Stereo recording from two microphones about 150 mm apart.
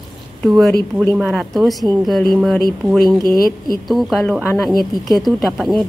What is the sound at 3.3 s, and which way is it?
Speech, 75° left (ahead or behind).